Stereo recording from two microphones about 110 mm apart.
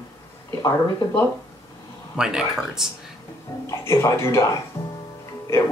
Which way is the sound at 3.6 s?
25° left (ahead or behind).